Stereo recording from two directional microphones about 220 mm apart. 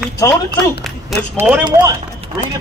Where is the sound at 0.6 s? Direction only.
Centre (ahead or behind).